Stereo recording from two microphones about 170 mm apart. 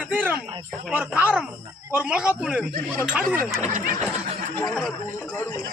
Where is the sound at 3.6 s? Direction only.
50° right (ahead or behind).